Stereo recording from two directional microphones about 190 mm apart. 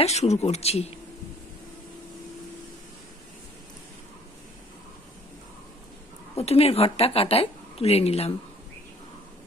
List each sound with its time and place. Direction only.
0.0 s a woman's voice: 35° left (ahead or behind)
6.3 s a woman's voice: 30° left (ahead or behind)